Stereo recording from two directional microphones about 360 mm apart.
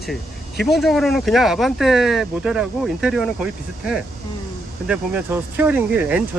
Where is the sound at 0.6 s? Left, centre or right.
Centre.